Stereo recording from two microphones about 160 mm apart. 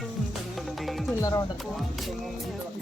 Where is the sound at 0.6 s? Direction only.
Centre (ahead or behind).